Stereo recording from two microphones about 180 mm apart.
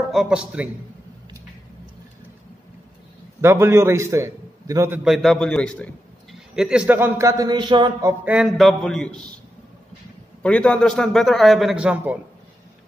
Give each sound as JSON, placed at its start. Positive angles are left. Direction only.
{"t": 0.1, "sound": "a man's voice", "side_deg": -5}
{"t": 3.3, "sound": "a man's voice", "side_deg": -15}
{"t": 5.0, "sound": "a man's voice", "side_deg": 0}
{"t": 6.5, "sound": "a man's voice", "side_deg": -5}
{"t": 8.4, "sound": "a man's voice", "side_deg": 0}
{"t": 10.4, "sound": "a man's voice", "side_deg": 5}